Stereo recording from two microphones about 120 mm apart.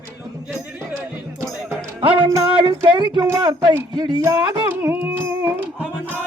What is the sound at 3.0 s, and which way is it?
Speech, 40° right (ahead or behind).